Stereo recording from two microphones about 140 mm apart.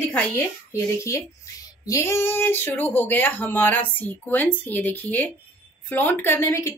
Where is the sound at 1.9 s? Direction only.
20° left (ahead or behind).